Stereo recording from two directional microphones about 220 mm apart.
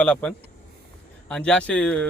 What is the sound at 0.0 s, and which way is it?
Speech, 5° left (ahead or behind).